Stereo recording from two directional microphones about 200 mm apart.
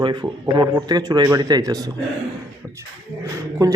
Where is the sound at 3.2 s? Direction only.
15° right (ahead or behind).